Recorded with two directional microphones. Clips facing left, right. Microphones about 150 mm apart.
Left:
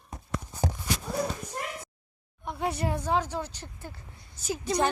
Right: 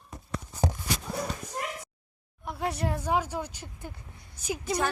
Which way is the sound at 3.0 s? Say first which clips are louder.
Right 1 dB; 10° right (ahead or behind).